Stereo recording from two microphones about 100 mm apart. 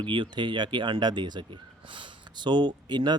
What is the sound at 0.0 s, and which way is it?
Speech, 55° right (ahead or behind).